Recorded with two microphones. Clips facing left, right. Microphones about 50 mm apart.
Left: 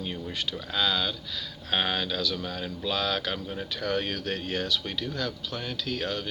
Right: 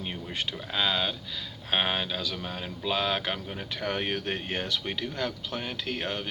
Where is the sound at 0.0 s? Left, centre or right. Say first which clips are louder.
Left 1 dB; right.